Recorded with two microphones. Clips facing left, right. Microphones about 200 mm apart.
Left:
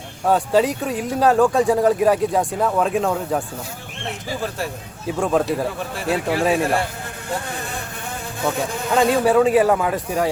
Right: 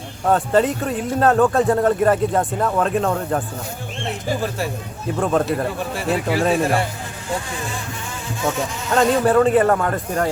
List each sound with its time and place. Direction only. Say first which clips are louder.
0.3 s speech: even; centre (ahead or behind)
5.2 s speech: even; centre (ahead or behind)
7.3 s speech: right 1 dB; 60° left (ahead or behind)
9.2 s speech: even; centre (ahead or behind)